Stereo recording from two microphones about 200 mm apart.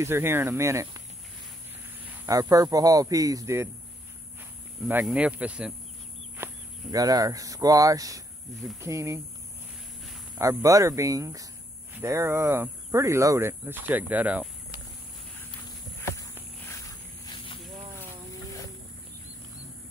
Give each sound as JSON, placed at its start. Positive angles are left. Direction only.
{"t": 0.0, "sound": "speech", "side_deg": -10}
{"t": 2.2, "sound": "speech", "side_deg": -15}
{"t": 4.8, "sound": "speech", "side_deg": -10}
{"t": 10.4, "sound": "speech", "side_deg": -15}
{"t": 16.0, "sound": "a sound", "side_deg": 15}
{"t": 17.3, "sound": "a sound", "side_deg": 25}